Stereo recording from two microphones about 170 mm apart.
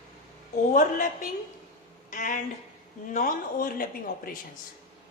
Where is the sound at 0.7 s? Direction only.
50° left (ahead or behind).